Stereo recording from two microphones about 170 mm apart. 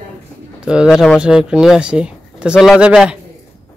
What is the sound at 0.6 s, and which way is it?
Speech, 5° right (ahead or behind).